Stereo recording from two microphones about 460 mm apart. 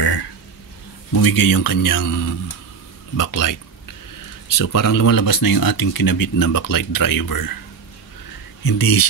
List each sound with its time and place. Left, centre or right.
1.1 s speech: left
8.6 s speech: left